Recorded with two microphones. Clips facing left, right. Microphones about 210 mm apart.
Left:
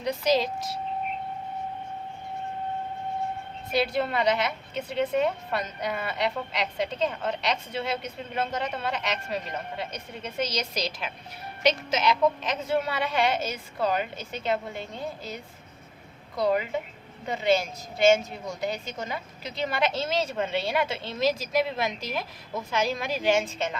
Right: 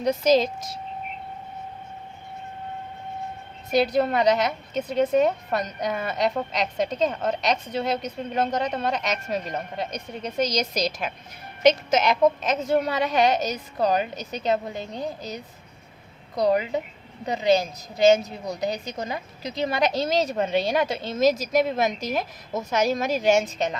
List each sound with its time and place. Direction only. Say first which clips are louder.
0.0 s a woman's voice: right 5 dB; 45° right (ahead or behind)
3.7 s a woman's voice: right 5 dB; 40° right (ahead or behind)
16.3 s a woman's voice: right 3 dB; 40° right (ahead or behind)
18.0 s a woman's voice: right 3 dB; 40° right (ahead or behind)